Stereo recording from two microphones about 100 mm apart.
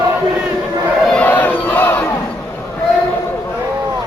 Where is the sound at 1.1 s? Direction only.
15° left (ahead or behind).